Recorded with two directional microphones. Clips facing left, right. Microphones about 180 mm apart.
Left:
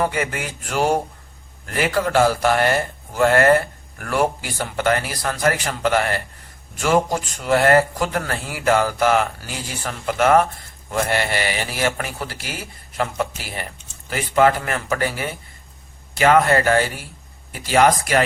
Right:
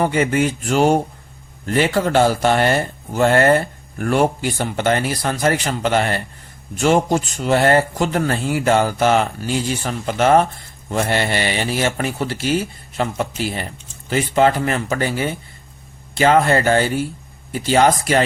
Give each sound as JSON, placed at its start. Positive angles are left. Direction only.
{"t": 0.0, "sound": "speech", "side_deg": -25}